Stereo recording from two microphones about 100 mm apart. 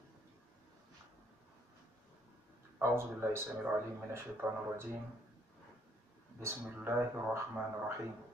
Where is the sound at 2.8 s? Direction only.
25° right (ahead or behind).